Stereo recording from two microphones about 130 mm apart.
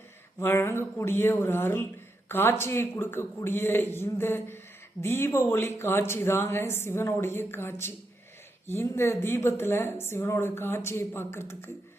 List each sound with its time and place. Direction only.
0.3 s a man's voice: 20° left (ahead or behind)